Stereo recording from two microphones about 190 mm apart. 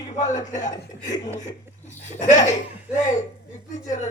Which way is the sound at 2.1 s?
40° left (ahead or behind).